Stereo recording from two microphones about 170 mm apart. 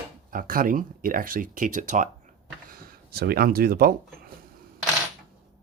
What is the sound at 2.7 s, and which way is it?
Speech, 60° right (ahead or behind).